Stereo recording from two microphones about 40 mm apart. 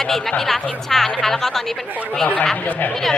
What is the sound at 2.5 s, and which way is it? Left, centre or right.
Speech, left.